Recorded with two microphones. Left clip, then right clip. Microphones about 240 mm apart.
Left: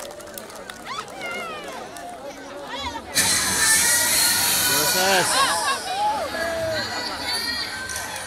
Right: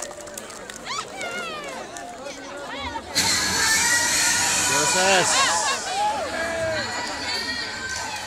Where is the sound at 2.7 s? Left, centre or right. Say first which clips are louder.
Left 1 dB; left.